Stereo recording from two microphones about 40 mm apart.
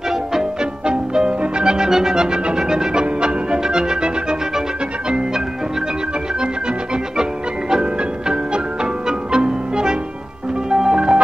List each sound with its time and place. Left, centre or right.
0.1 s music: centre
7.7 s music: centre